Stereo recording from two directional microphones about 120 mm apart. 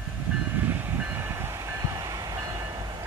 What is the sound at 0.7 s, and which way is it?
Train, 20° right (ahead or behind).